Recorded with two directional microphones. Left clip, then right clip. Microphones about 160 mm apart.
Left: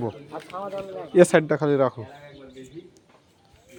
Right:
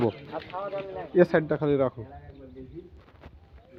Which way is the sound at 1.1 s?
45° left (ahead or behind).